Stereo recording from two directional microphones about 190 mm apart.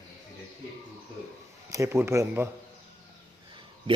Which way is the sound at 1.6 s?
15° right (ahead or behind).